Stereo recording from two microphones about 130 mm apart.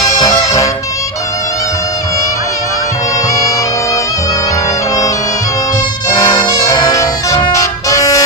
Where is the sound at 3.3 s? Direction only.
25° left (ahead or behind).